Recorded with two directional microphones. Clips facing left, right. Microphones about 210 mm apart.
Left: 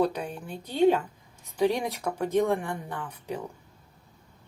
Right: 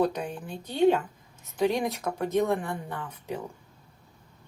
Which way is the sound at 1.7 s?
10° right (ahead or behind).